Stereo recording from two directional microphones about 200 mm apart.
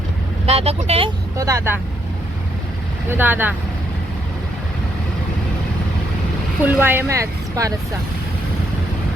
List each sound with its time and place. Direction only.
0.4 s speech: 30° right (ahead or behind)
1.4 s speech: 15° right (ahead or behind)
3.1 s speech: 10° right (ahead or behind)
6.7 s speech: 10° right (ahead or behind)